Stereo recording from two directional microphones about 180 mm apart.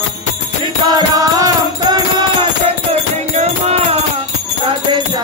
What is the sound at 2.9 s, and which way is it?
Music, 35° right (ahead or behind).